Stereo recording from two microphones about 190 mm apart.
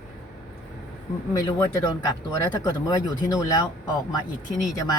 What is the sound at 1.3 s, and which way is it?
Speech, 15° left (ahead or behind).